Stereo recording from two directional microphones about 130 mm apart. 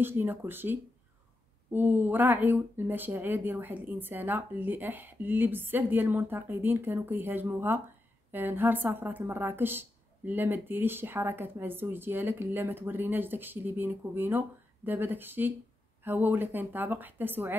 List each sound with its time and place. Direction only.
0.0 s speech: 15° right (ahead or behind)